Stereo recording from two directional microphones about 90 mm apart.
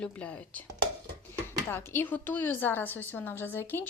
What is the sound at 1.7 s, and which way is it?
A woman's voice, 25° left (ahead or behind).